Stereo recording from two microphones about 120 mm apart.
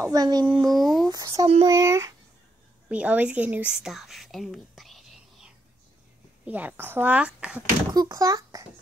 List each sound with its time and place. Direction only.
0.0 s a child's voice: 30° right (ahead or behind)
0.6 s speech: centre (ahead or behind)
1.1 s a child's voice: 35° right (ahead or behind)
2.9 s a woman's voice: 10° right (ahead or behind)
6.4 s speech: 15° right (ahead or behind)
7.9 s a child's voice: 35° right (ahead or behind)